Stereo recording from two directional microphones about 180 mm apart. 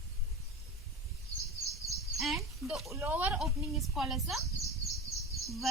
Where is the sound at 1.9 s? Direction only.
Centre (ahead or behind).